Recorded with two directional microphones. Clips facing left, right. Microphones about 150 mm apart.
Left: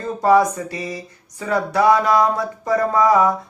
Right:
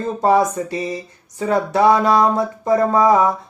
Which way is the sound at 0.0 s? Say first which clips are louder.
Even; 25° right (ahead or behind).